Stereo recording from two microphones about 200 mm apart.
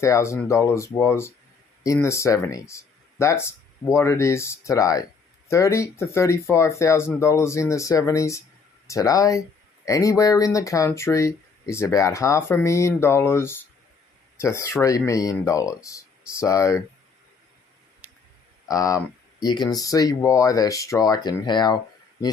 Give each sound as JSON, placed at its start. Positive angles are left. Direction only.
{"t": 0.0, "sound": "speech", "side_deg": 15}
{"t": 18.7, "sound": "speech", "side_deg": 15}